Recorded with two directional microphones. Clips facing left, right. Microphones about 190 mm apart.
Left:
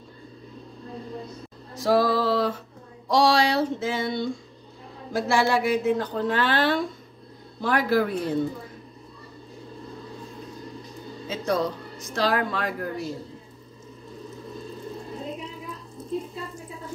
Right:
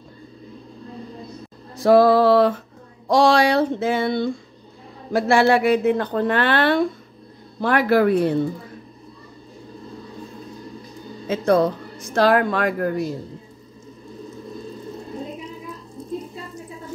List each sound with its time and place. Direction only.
1.8 s music: 60° right (ahead or behind)
3.1 s speech: 50° right (ahead or behind)
11.2 s speech: 55° right (ahead or behind)